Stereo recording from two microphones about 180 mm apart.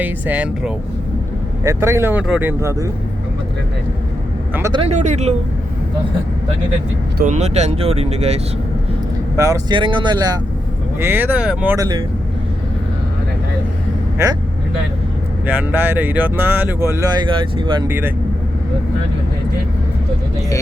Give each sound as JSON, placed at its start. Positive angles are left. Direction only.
{"t": 0.0, "sound": "speech", "side_deg": -10}
{"t": 4.7, "sound": "speech", "side_deg": -35}
{"t": 7.2, "sound": "speech", "side_deg": -40}
{"t": 9.3, "sound": "speech", "side_deg": -15}
{"t": 11.0, "sound": "speech", "side_deg": -10}
{"t": 15.4, "sound": "speech", "side_deg": -10}
{"t": 17.8, "sound": "speech", "side_deg": -10}